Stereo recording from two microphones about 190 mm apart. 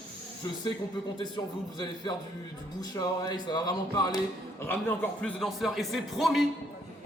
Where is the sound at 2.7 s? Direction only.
20° left (ahead or behind).